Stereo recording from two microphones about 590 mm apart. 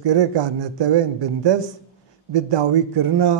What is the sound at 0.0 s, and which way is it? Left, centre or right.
A man's voice, right.